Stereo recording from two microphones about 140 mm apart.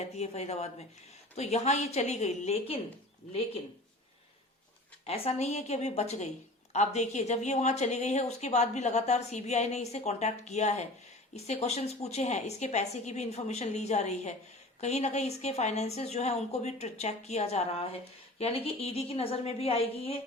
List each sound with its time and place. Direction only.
0.0 s a woman's voice: 50° left (ahead or behind)
5.0 s a woman's voice: 45° left (ahead or behind)